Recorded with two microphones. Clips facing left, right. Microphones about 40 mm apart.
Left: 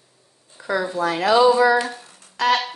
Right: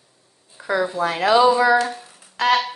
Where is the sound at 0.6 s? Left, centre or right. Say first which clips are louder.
Right 2 dB; centre.